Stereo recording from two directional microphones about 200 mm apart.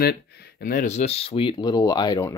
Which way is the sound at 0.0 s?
50° left (ahead or behind).